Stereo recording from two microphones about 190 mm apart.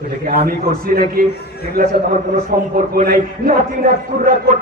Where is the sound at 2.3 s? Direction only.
45° right (ahead or behind).